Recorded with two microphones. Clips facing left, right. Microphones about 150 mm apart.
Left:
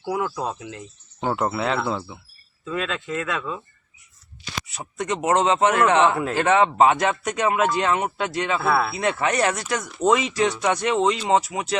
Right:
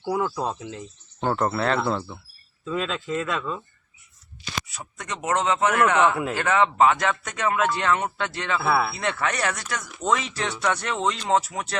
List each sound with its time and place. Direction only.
0.0 s speech: 5° left (ahead or behind)
4.7 s speech: 25° left (ahead or behind)
8.6 s speech: 5° right (ahead or behind)
8.9 s speech: 15° left (ahead or behind)